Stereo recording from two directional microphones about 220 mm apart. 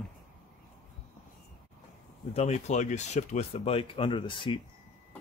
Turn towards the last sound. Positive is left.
turn(degrees=20)  # may be behind; listen again after turning